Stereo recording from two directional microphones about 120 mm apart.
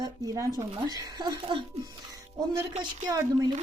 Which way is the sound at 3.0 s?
30° right (ahead or behind).